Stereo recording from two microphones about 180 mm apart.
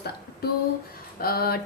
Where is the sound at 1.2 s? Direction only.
60° left (ahead or behind).